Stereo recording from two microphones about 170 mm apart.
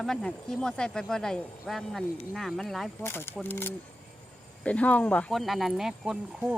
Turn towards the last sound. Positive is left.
turn(degrees=-5)  # may be behind; listen again after turning